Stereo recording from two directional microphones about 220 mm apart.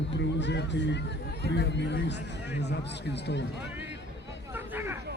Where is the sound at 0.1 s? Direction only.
55° left (ahead or behind).